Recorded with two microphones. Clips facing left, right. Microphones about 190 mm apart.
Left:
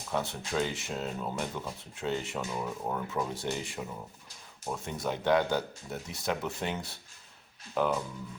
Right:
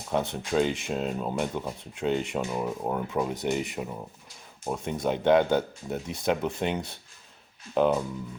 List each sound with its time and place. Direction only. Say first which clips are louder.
0.1 s speech: right 6 dB; 20° right (ahead or behind)
7.8 s speech: right 6 dB; 20° right (ahead or behind)